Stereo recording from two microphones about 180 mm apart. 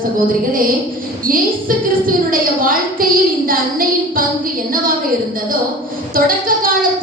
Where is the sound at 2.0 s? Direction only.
50° right (ahead or behind).